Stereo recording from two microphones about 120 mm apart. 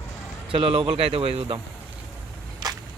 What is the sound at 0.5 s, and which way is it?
Speech, 50° right (ahead or behind).